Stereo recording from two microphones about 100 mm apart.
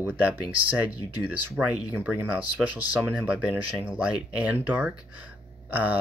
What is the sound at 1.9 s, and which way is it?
Speech, 20° right (ahead or behind).